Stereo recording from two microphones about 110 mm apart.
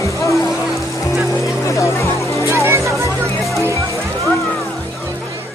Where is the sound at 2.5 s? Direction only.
25° right (ahead or behind).